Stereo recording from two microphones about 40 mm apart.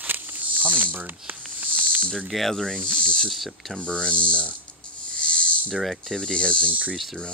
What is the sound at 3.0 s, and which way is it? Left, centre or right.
Insect, left.